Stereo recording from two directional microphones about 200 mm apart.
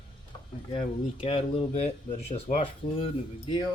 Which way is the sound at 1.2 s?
30° left (ahead or behind).